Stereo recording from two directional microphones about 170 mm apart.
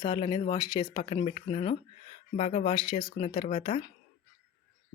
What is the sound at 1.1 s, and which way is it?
Speech, 40° left (ahead or behind).